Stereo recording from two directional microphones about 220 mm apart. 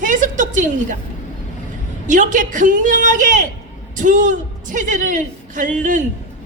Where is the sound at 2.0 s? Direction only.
35° right (ahead or behind).